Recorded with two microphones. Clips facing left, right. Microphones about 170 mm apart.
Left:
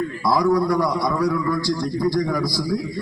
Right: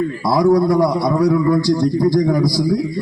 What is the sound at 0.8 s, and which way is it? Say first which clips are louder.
Speech: right 6 dB; 25° right (ahead or behind).